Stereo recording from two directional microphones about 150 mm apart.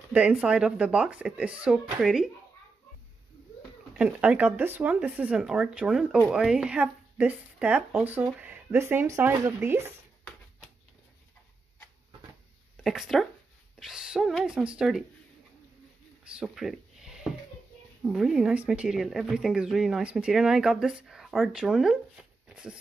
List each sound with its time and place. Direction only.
0.1 s speech: 10° right (ahead or behind)
3.9 s speech: 10° right (ahead or behind)
12.7 s speech: 5° right (ahead or behind)
16.3 s a sound: 5° right (ahead or behind)
18.1 s speech: 5° right (ahead or behind)